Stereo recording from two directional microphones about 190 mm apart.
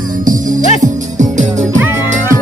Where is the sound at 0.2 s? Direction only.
45° right (ahead or behind).